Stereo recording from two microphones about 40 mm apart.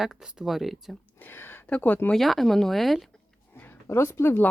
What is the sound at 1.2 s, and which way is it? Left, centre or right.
Speech, left.